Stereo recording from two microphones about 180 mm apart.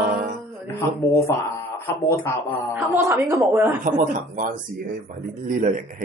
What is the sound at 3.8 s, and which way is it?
Speech, 45° right (ahead or behind).